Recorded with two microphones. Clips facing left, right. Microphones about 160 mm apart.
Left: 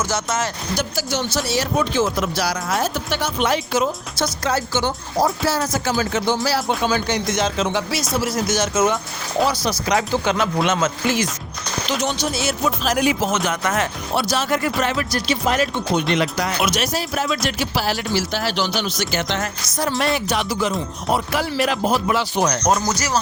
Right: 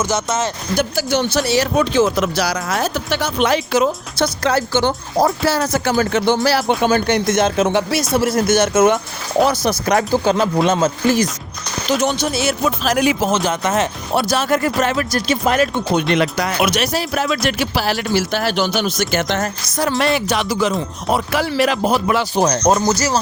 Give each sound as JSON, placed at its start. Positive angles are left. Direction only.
{"t": 0.0, "sound": "speech", "side_deg": -20}
{"t": 0.8, "sound": "speech", "side_deg": -60}
{"t": 10.2, "sound": "speech", "side_deg": -35}
{"t": 11.9, "sound": "speech", "side_deg": -55}
{"t": 13.3, "sound": "speech", "side_deg": -30}
{"t": 14.2, "sound": "speech", "side_deg": -50}
{"t": 20.1, "sound": "speech", "side_deg": -90}
{"t": 22.2, "sound": "speech", "side_deg": -35}